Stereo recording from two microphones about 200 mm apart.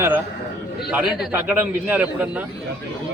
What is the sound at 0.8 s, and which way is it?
A man's voice, centre (ahead or behind).